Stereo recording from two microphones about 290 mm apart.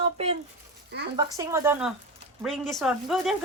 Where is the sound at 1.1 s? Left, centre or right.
Centre.